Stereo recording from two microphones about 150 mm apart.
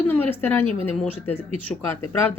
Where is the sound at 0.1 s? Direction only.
10° left (ahead or behind).